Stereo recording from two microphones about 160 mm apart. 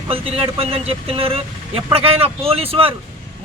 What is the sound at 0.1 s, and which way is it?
Speech, 35° right (ahead or behind).